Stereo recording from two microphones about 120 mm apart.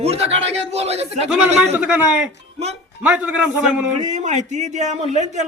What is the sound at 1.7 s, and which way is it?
Speech, 10° right (ahead or behind).